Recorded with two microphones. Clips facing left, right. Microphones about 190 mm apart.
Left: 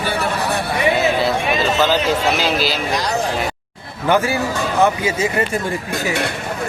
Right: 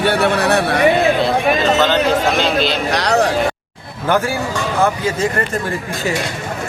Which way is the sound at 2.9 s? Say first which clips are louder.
Right 8 dB; 70° right (ahead or behind).